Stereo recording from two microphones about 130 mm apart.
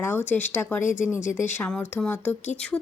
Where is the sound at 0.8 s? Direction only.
75° left (ahead or behind).